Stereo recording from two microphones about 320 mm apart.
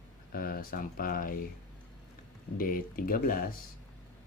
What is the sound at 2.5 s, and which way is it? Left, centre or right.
Speech, left.